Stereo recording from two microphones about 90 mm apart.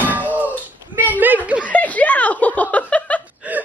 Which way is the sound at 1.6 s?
15° left (ahead or behind).